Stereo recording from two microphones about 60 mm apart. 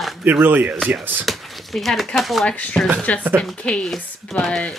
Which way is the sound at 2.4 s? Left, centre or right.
Centre.